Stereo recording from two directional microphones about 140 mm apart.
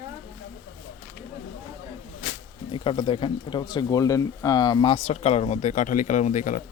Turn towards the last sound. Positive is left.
turn(degrees=65)  # may be behind; listen again after turning